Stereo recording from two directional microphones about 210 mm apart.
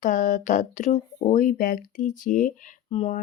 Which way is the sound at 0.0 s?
35° left (ahead or behind).